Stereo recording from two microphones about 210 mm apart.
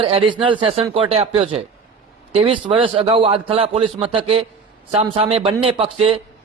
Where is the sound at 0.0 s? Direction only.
25° right (ahead or behind).